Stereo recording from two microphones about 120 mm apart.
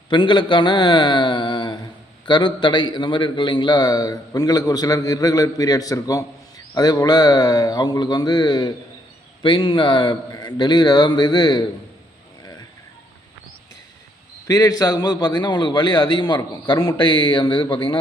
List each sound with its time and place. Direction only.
0.1 s a man's voice: 40° left (ahead or behind)
14.4 s a man's voice: 30° left (ahead or behind); by 17.9 s 45° left (ahead or behind)